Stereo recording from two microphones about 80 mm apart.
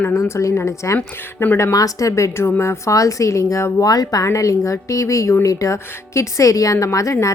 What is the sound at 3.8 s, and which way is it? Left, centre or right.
Speech, left.